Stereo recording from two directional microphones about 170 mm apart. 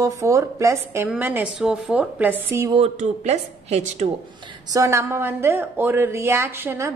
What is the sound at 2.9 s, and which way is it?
A woman's voice, 40° right (ahead or behind).